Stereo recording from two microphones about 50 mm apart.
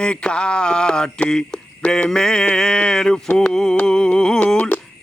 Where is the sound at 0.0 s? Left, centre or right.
Centre.